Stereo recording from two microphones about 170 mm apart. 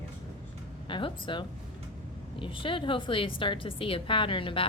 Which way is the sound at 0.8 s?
30° left (ahead or behind).